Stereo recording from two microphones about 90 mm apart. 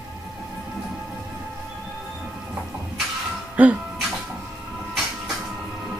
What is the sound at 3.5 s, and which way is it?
Music, 15° right (ahead or behind).